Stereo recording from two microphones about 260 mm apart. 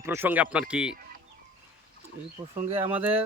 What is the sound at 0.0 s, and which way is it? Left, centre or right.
Speech, centre.